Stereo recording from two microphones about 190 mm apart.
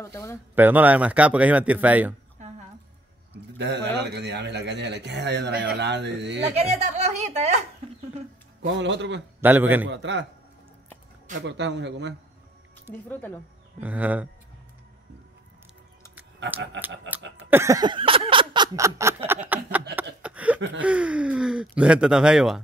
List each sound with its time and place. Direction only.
0.0 s speech: 15° left (ahead or behind)
0.6 s a man's voice: 10° right (ahead or behind)
2.4 s a sound: 40° right (ahead or behind)
3.5 s a man's voice: 65° right (ahead or behind)
6.4 s a woman's voice: 35° right (ahead or behind)
8.7 s a man's voice: 70° right (ahead or behind)
9.4 s a man's voice: 10° right (ahead or behind)
9.8 s a man's voice: 70° right (ahead or behind)
11.4 s a man's voice: 65° right (ahead or behind)
13.1 s speech: 10° left (ahead or behind)
13.7 s a man's voice: 10° right (ahead or behind)
16.8 s a man's voice: 65° right (ahead or behind)
17.5 s a sound: 15° right (ahead or behind)
20.8 s speech: 5° right (ahead or behind)